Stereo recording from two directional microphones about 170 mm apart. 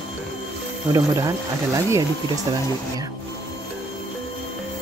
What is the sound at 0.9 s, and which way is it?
Speech, 20° right (ahead or behind).